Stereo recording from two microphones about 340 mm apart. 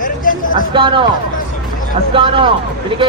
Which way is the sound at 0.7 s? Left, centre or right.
Centre.